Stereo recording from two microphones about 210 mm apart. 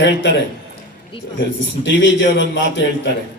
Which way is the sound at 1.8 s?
60° left (ahead or behind).